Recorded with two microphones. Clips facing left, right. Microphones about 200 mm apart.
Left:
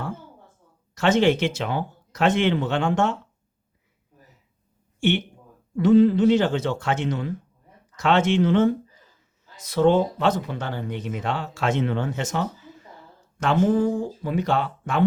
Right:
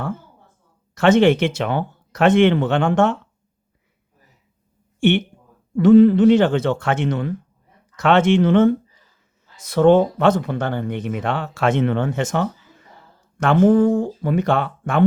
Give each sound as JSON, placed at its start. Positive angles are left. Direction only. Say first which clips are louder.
{"t": 0.9, "sound": "speech", "louder": "right 5 dB", "side_deg": -55}
{"t": 4.9, "sound": "speech", "louder": "right 5 dB", "side_deg": -60}